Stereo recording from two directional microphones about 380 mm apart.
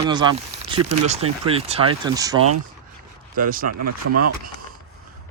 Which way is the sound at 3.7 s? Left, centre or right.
Right.